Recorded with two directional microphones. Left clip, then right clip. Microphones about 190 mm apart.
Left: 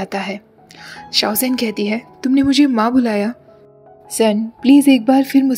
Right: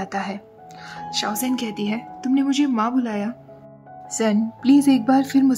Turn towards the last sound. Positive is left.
turn(degrees=10)  # may be behind; listen again after turning